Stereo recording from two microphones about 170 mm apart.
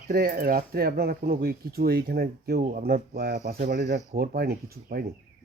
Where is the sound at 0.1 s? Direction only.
60° right (ahead or behind).